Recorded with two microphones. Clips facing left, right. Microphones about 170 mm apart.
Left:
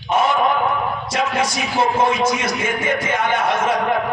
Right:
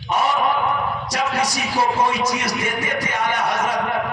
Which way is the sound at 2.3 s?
35° right (ahead or behind).